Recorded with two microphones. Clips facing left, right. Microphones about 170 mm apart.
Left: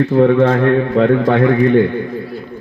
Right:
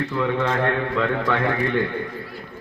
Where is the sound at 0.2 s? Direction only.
50° left (ahead or behind).